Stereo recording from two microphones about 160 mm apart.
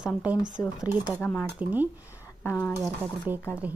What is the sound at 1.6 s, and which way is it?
Speech, 10° right (ahead or behind).